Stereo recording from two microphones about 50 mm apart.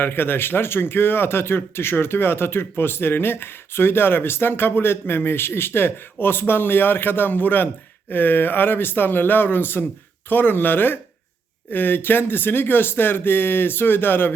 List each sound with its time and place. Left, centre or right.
0.0 s speech: left